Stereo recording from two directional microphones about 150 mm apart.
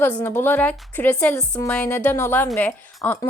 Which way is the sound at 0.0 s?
10° left (ahead or behind).